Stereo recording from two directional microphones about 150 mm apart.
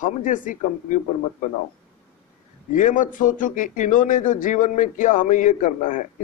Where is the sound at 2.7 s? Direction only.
60° left (ahead or behind).